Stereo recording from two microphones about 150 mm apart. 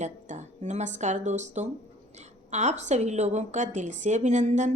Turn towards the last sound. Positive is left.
turn(degrees=-50)  # may be behind; listen again after turning